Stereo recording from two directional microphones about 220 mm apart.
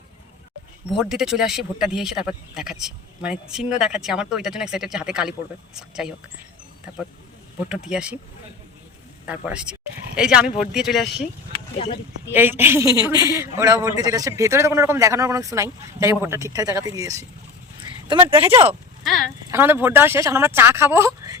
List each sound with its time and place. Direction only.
0.9 s speech: centre (ahead or behind)
7.9 s speech: 5° right (ahead or behind)
9.2 s speech: 5° right (ahead or behind)
12.3 s a man's voice: 10° right (ahead or behind)
18.3 s a man's voice: 10° right (ahead or behind)